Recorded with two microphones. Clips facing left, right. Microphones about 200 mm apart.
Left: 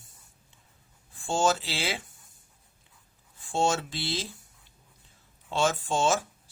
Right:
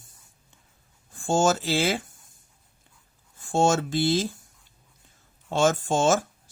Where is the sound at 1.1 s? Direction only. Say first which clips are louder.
Right 4 dB; 45° right (ahead or behind).